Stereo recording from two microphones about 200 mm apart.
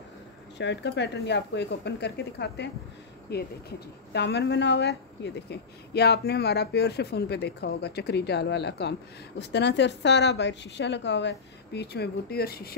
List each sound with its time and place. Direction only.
0.6 s speech: 60° left (ahead or behind)